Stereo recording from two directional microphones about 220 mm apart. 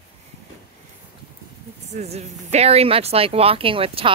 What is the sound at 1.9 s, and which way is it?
Speech, 30° right (ahead or behind).